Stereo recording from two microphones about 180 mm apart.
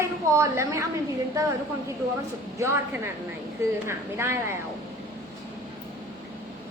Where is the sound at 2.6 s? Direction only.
15° right (ahead or behind).